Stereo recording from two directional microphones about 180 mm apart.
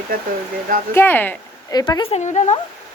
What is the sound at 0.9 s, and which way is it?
Speech, 10° left (ahead or behind).